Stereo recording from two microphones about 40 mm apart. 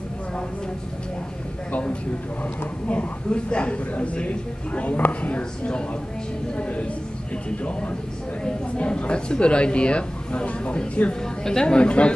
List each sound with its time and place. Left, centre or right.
1.7 s speech: left
4.9 s speech: left
8.5 s speech: left
11.4 s speech: centre